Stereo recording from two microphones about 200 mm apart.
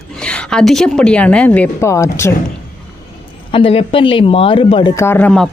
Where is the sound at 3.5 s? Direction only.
25° left (ahead or behind).